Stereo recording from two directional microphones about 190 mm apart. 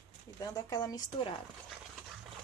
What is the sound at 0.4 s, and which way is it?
Speech, 20° left (ahead or behind).